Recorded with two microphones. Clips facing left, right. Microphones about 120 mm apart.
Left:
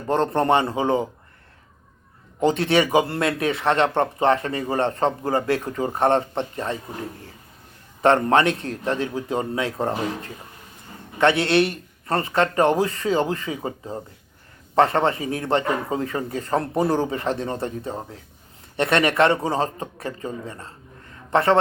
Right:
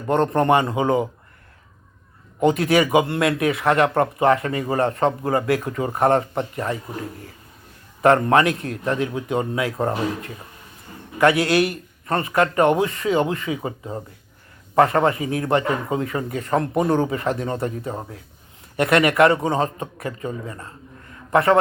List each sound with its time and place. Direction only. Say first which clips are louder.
0.1 s speech: right 2 dB; 30° left (ahead or behind)
2.4 s speech: right 2 dB; 30° left (ahead or behind)
14.8 s a man's voice: right 2 dB; 30° left (ahead or behind)